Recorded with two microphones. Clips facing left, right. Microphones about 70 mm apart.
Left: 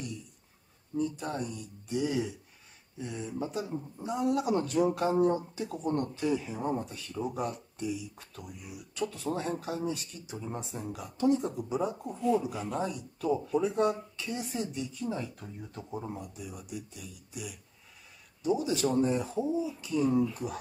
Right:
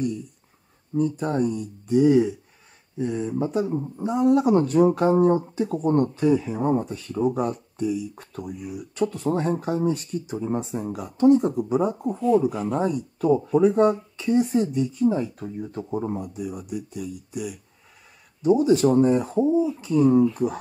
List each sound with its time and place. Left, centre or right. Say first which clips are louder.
0.9 s speech: right 9 dB; right
12.2 s speech: right 8 dB; centre
12.7 s speech: right 9 dB; right
15.1 s speech: right 10 dB; right
15.9 s speech: right 10 dB; right